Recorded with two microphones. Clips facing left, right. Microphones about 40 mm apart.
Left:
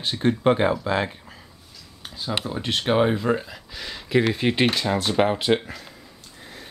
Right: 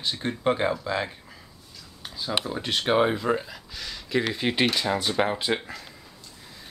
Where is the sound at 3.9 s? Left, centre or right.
Centre.